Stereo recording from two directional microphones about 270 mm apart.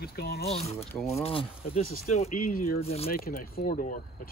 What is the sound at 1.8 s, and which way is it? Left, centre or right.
Speech, left.